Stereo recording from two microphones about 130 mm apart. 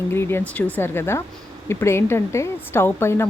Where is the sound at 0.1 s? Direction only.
20° left (ahead or behind).